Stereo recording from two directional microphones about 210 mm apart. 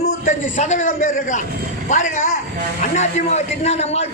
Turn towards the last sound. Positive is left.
turn(degrees=30)  # may be behind; listen again after turning